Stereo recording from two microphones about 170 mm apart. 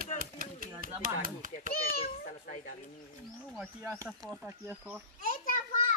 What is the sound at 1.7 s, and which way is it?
A child's voice, 60° left (ahead or behind).